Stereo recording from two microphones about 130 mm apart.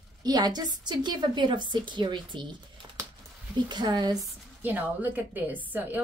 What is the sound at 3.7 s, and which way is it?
Speech, 35° right (ahead or behind).